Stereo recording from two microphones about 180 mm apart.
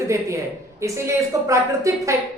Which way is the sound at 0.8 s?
15° right (ahead or behind).